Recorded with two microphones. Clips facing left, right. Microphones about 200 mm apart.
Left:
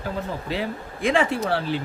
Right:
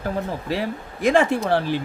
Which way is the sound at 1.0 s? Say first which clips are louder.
Right 3 dB; 45° right (ahead or behind).